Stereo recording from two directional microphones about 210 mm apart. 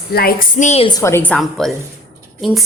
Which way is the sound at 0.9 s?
15° left (ahead or behind).